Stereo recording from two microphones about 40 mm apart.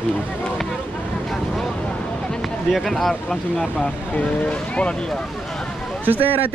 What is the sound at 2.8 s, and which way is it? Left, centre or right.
Speech, centre.